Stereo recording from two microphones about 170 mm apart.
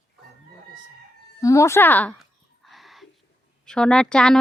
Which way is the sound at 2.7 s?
Centre (ahead or behind).